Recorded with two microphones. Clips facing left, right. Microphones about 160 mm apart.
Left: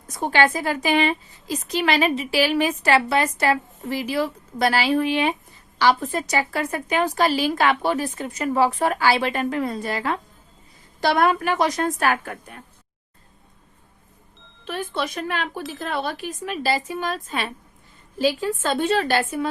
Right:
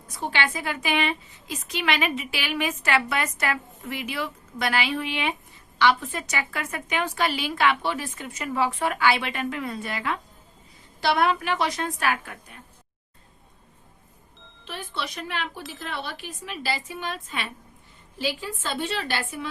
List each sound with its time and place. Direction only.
0.1 s a woman's voice: 45° left (ahead or behind)
14.7 s a woman's voice: 45° left (ahead or behind)